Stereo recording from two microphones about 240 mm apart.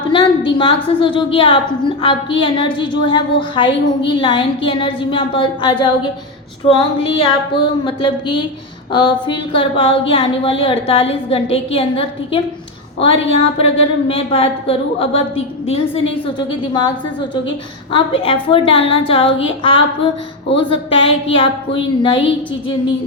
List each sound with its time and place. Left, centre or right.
0.1 s a woman's voice: left
17.9 s a woman's voice: left